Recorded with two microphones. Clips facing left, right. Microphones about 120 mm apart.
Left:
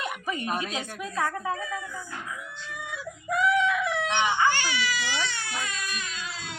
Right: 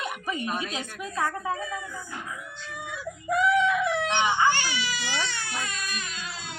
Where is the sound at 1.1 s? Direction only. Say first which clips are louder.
Even; 25° right (ahead or behind).